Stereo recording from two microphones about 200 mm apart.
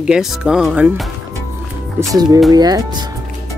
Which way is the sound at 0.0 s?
Centre (ahead or behind).